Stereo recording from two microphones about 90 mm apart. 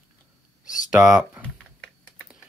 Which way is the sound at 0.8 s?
10° right (ahead or behind).